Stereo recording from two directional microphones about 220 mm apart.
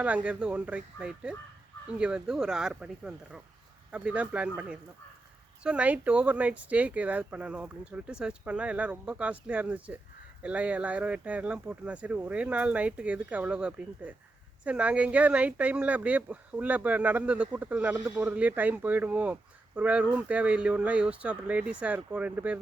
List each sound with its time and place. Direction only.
0.0 s speech: 5° right (ahead or behind)